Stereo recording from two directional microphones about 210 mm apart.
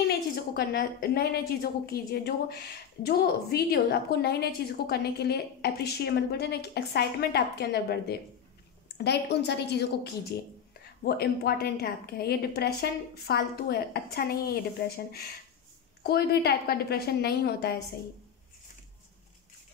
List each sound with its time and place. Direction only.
0.6 s a woman's voice: 45° left (ahead or behind)
16.0 s a woman's voice: 50° left (ahead or behind)